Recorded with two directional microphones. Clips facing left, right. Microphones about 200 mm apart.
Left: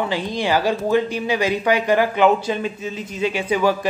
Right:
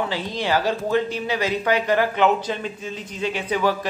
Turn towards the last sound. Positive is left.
turn(degrees=10)  # may be behind; listen again after turning